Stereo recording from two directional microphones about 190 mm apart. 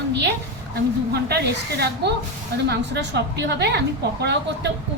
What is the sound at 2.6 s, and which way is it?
Speech, 65° right (ahead or behind).